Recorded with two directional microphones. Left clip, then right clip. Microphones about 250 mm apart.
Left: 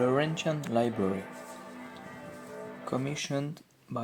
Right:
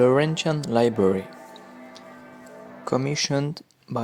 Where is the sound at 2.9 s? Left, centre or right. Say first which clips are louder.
Right 10 dB; right.